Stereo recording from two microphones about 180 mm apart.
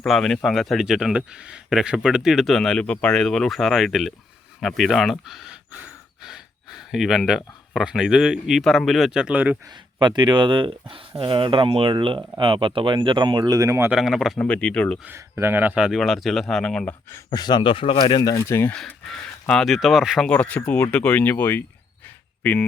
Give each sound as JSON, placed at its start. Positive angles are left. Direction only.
{"t": 0.0, "sound": "speech", "side_deg": 0}
{"t": 9.6, "sound": "speech", "side_deg": -25}
{"t": 14.0, "sound": "speech", "side_deg": 0}
{"t": 15.0, "sound": "speech", "side_deg": -15}
{"t": 17.3, "sound": "speech", "side_deg": 25}
{"t": 19.5, "sound": "speech", "side_deg": 0}
{"t": 22.0, "sound": "a sound", "side_deg": 10}